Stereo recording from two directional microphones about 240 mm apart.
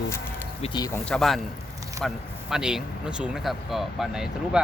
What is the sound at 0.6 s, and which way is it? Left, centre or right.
Speech, centre.